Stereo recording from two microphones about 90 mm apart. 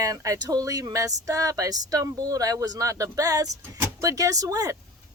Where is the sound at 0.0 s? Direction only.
40° right (ahead or behind).